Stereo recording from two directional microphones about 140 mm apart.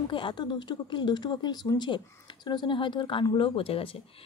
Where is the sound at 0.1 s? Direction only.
35° left (ahead or behind).